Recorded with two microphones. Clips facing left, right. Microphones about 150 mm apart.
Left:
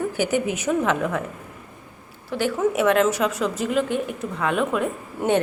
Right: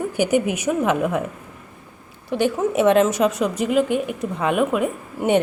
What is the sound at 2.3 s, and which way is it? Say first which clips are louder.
A woman's voice: right 2 dB; 20° right (ahead or behind).